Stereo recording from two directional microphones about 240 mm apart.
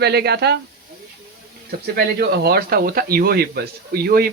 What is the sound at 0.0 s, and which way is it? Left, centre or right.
Speech, right.